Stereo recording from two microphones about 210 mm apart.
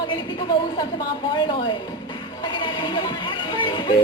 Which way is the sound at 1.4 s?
20° left (ahead or behind).